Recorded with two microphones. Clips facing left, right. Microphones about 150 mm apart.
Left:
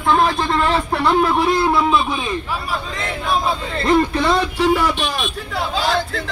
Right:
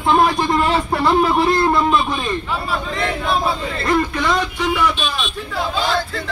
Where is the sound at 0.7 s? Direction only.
Centre (ahead or behind).